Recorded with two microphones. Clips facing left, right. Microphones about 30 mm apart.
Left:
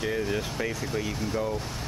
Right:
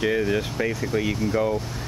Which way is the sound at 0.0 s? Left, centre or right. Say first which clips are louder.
Right 6 dB; centre.